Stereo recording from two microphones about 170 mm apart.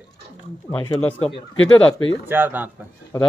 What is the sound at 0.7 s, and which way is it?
Speech, 10° left (ahead or behind).